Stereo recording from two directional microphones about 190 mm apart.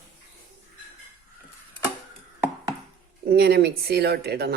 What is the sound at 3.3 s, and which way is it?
Speech, 60° right (ahead or behind).